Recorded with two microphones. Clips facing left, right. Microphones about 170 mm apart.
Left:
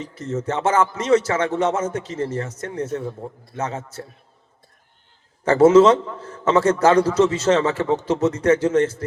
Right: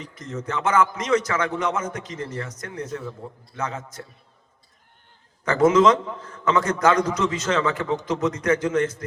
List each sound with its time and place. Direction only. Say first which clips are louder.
0.0 s a man's voice: left 6 dB; 30° left (ahead or behind)
5.5 s a man's voice: left 5 dB; 30° left (ahead or behind)